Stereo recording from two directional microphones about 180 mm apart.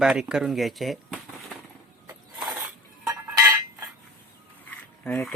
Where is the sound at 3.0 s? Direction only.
15° right (ahead or behind).